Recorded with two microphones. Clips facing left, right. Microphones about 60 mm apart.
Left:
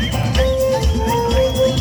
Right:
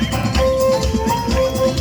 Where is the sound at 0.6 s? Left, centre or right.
Right.